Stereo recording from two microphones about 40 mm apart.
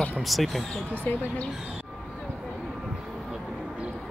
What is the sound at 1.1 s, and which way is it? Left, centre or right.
Speech, left.